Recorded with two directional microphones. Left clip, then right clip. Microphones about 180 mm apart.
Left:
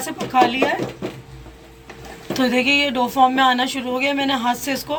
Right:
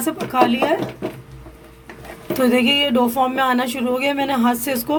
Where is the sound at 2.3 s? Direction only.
50° right (ahead or behind).